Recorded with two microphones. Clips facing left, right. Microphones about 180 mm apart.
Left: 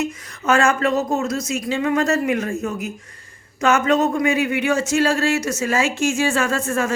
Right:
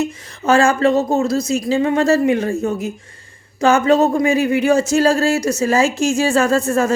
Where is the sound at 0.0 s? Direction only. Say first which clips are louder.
Right 3 dB; 30° right (ahead or behind).